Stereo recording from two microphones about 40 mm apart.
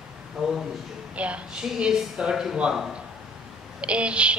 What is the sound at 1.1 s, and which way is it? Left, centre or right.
Speech, right.